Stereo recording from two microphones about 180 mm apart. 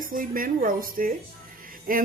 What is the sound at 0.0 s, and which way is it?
A woman's voice, 50° right (ahead or behind).